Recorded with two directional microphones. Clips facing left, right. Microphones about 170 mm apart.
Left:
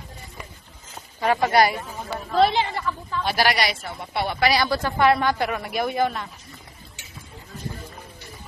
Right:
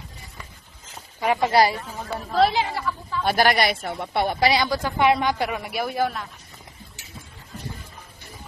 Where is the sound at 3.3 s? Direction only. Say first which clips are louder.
Right 3 dB; 50° right (ahead or behind).